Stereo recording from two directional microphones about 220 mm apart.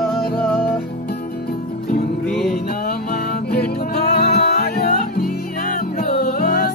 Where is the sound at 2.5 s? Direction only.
40° left (ahead or behind).